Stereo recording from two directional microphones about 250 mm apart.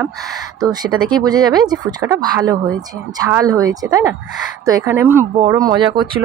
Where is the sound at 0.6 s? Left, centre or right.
Centre.